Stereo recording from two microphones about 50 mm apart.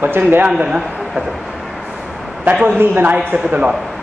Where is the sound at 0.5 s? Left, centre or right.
Centre.